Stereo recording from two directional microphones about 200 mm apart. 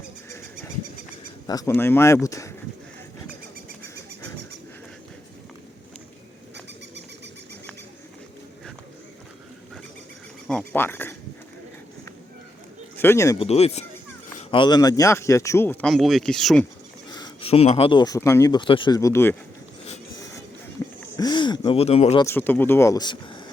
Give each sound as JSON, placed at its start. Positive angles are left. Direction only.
{"t": 1.5, "sound": "speech", "side_deg": 15}
{"t": 10.4, "sound": "a sound", "side_deg": 5}
{"t": 13.0, "sound": "speech", "side_deg": 15}
{"t": 13.4, "sound": "speech", "side_deg": 30}
{"t": 15.9, "sound": "speech", "side_deg": 0}
{"t": 17.1, "sound": "speech", "side_deg": 20}
{"t": 20.8, "sound": "a sound", "side_deg": 15}
{"t": 22.2, "sound": "speech", "side_deg": 10}